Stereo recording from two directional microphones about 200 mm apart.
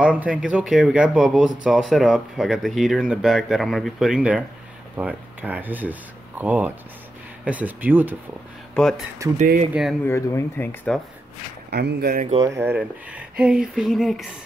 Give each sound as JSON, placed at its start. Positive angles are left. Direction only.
{"t": 0.0, "sound": "speech", "side_deg": -5}
{"t": 8.7, "sound": "speech", "side_deg": 0}
{"t": 9.4, "sound": "speech", "side_deg": -35}
{"t": 10.0, "sound": "speech", "side_deg": 10}
{"t": 11.7, "sound": "speech", "side_deg": -55}
{"t": 12.4, "sound": "speech", "side_deg": -10}